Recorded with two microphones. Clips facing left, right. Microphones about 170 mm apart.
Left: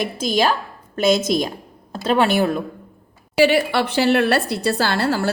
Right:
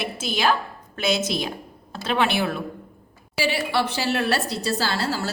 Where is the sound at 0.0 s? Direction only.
40° left (ahead or behind).